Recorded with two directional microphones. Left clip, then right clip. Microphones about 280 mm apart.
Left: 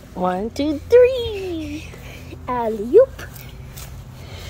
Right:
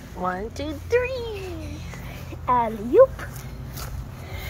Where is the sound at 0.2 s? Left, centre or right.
Left.